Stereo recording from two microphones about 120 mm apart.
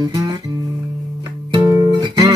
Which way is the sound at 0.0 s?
35° right (ahead or behind).